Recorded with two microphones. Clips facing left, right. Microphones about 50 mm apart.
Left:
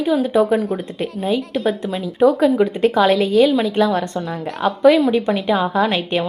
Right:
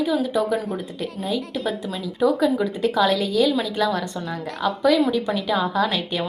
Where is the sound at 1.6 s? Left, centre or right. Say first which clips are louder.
Left 6 dB; centre.